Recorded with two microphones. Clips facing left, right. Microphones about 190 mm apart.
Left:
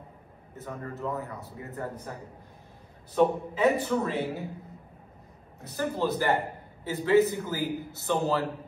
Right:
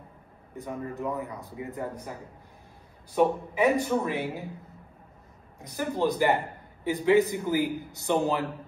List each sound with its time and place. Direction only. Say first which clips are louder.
0.6 s a man's voice: right 3 dB; 15° right (ahead or behind)
3.2 s a man's voice: even; 15° right (ahead or behind)
5.6 s a man's voice: right 1 dB; 15° right (ahead or behind)